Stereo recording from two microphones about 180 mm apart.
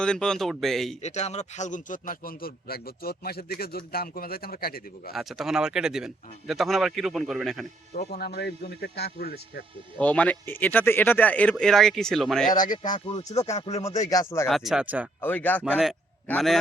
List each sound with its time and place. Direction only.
0.0 s a man's voice: 5° left (ahead or behind)
1.0 s a man's voice: 40° left (ahead or behind); by 5.1 s 55° left (ahead or behind)
5.1 s a man's voice: centre (ahead or behind)
7.9 s a man's voice: 60° left (ahead or behind)
10.0 s speech: 10° left (ahead or behind)
12.5 s speech: 25° left (ahead or behind)
13.6 s speech: 35° left (ahead or behind)
13.8 s speech: 20° left (ahead or behind)
14.4 s a man's voice: centre (ahead or behind)
15.2 s speech: 10° left (ahead or behind)
15.6 s a man's voice: 5° right (ahead or behind)